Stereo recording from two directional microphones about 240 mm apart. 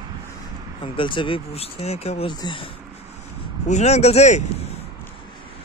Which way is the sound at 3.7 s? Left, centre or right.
Left.